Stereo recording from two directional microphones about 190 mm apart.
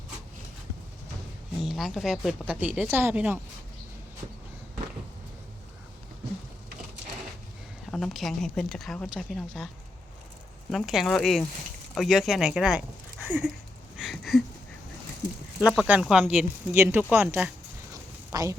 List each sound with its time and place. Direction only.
1.6 s speech: centre (ahead or behind)
7.9 s speech: centre (ahead or behind)
10.7 s speech: centre (ahead or behind)
13.9 s a sound: centre (ahead or behind)
15.6 s speech: 5° right (ahead or behind)
18.3 s a sound: 15° right (ahead or behind)